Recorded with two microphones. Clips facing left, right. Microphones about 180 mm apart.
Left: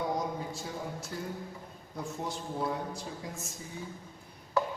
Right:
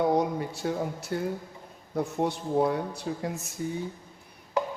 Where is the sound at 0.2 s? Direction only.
65° right (ahead or behind).